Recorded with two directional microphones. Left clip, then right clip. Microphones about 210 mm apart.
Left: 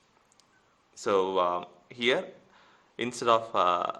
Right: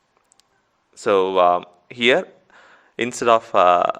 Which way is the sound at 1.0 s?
30° right (ahead or behind).